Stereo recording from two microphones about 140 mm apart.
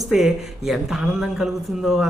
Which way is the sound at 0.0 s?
Centre (ahead or behind).